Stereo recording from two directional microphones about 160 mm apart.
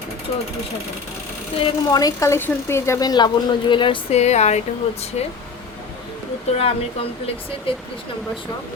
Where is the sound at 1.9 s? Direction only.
20° left (ahead or behind); by 5.0 s 45° left (ahead or behind).